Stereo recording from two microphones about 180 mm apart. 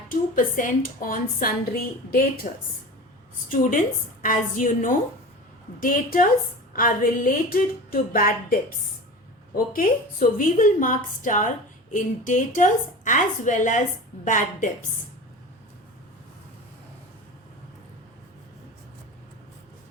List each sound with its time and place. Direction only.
0.1 s a woman's voice: 45° left (ahead or behind)
3.5 s a woman's voice: 50° left (ahead or behind)
9.6 s a woman's voice: 50° left (ahead or behind)